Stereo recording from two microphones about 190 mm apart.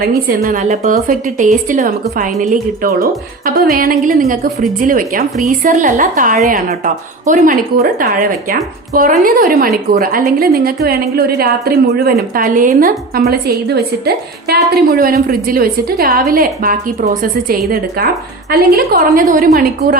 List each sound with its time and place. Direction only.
0.4 s a woman's voice: 45° right (ahead or behind)
14.0 s a woman's voice: 55° right (ahead or behind)
18.5 s a woman's voice: 50° right (ahead or behind)